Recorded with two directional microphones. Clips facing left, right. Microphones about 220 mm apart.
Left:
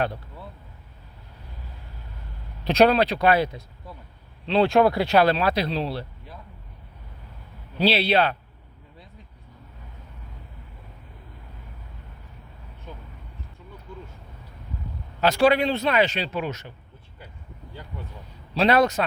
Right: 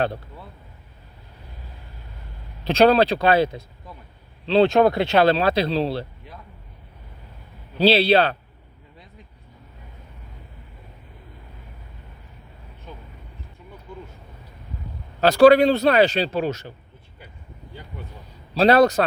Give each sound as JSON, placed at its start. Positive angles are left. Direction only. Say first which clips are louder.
{"t": 2.6, "sound": "speech", "louder": "right 2 dB", "side_deg": -30}
{"t": 7.8, "sound": "a man's voice", "louder": "right 4 dB", "side_deg": -30}
{"t": 15.2, "sound": "a man's voice", "louder": "right 7 dB", "side_deg": -35}
{"t": 18.5, "sound": "a man's voice", "louder": "right 4 dB", "side_deg": -35}